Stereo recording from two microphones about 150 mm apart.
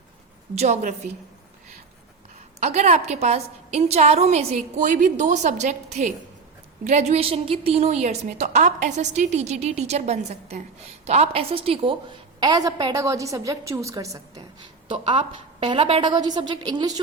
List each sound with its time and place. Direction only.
0.5 s a woman's voice: 50° right (ahead or behind)
2.6 s a woman's voice: 45° right (ahead or behind)
12.4 s a woman's voice: 25° right (ahead or behind)
14.8 s a woman's voice: 35° right (ahead or behind)